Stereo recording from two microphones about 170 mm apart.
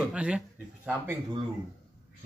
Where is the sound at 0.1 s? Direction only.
5° right (ahead or behind).